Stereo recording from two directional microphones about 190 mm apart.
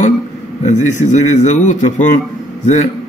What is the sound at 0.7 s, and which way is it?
A man's voice, 40° left (ahead or behind).